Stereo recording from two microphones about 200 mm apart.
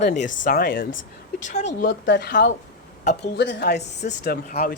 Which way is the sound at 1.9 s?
55° left (ahead or behind).